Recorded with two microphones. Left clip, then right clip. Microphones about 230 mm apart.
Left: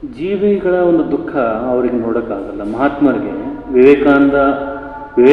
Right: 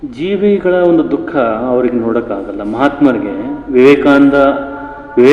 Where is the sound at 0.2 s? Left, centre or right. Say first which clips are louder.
Right 2 dB; right.